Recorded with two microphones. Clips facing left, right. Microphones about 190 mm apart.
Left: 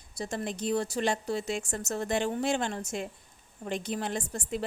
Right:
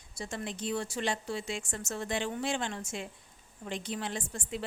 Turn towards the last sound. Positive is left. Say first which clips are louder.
# left 4 dB
turn(degrees=45)  # may be behind; listen again after turning